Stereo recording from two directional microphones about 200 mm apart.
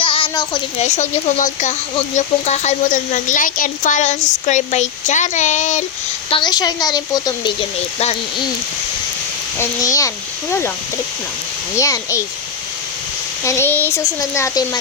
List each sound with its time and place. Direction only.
0.0 s a sound: 25° left (ahead or behind)
0.8 s speech: 35° left (ahead or behind)
6.3 s a woman's voice: 20° left (ahead or behind)
9.6 s speech: 15° left (ahead or behind)
11.8 s speech: 15° left (ahead or behind)
13.4 s speech: 15° left (ahead or behind)